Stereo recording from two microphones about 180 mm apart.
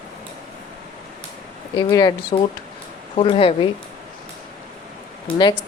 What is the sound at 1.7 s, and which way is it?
Speech, 20° left (ahead or behind).